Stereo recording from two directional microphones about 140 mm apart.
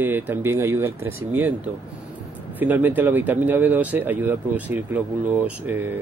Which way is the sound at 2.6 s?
15° right (ahead or behind).